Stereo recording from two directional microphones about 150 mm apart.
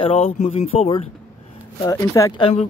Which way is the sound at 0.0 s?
40° left (ahead or behind).